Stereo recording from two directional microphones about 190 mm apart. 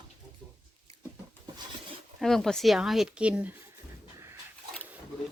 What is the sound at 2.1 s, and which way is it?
Speech, centre (ahead or behind).